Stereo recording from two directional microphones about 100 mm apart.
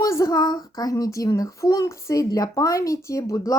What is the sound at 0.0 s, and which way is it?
A child's voice, 30° left (ahead or behind).